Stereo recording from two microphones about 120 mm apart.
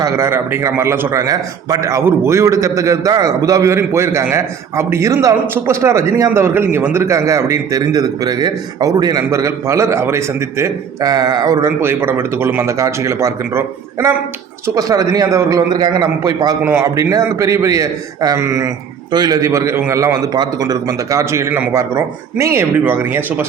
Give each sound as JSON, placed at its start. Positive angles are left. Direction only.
{"t": 0.0, "sound": "a man's voice", "side_deg": -20}
{"t": 16.6, "sound": "a man's voice", "side_deg": -25}
{"t": 19.1, "sound": "a man's voice", "side_deg": -35}